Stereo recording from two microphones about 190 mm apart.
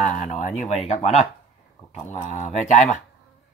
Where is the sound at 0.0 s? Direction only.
40° left (ahead or behind).